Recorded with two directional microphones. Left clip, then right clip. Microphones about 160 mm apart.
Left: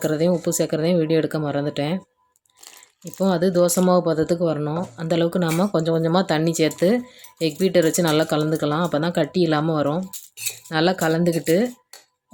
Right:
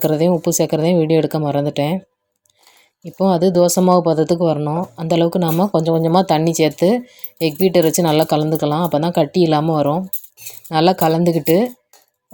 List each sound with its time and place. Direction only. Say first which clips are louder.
0.0 s speech: right 5 dB; 20° right (ahead or behind)
3.2 s speech: right 5 dB; 20° right (ahead or behind)